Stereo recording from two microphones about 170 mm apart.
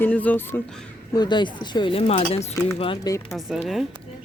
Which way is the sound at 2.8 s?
30° left (ahead or behind).